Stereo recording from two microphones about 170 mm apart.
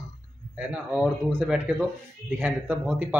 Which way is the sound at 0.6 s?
5° right (ahead or behind).